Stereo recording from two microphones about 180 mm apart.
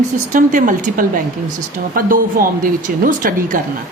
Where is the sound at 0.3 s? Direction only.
50° right (ahead or behind).